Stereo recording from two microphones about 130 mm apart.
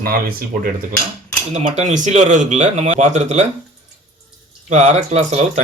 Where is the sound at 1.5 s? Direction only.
60° right (ahead or behind).